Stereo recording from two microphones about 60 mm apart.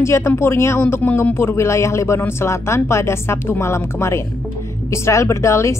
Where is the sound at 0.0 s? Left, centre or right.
Left.